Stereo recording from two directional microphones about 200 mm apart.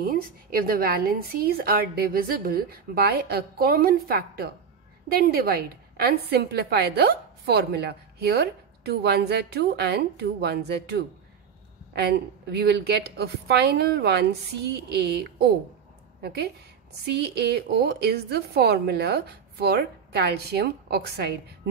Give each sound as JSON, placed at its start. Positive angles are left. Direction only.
{"t": 0.0, "sound": "a woman's voice", "side_deg": -50}